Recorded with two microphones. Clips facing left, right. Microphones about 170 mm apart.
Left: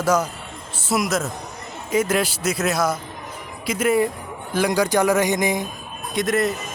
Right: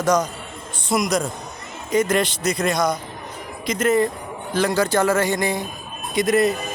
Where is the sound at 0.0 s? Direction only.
5° left (ahead or behind).